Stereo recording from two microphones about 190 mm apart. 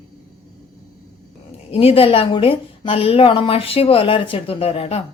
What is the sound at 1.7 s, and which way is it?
A woman's voice, 30° left (ahead or behind).